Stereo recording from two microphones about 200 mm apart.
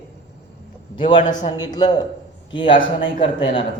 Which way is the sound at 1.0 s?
25° left (ahead or behind).